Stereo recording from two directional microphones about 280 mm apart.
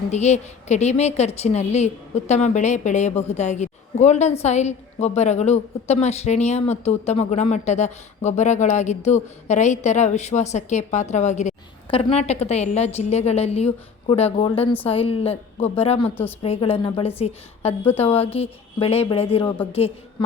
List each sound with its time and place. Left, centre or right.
0.1 s a woman's voice: left